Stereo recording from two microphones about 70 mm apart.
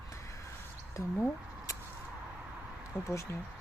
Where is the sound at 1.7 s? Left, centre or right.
Left.